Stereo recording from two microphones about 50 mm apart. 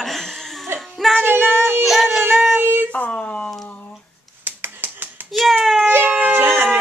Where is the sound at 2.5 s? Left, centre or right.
Right.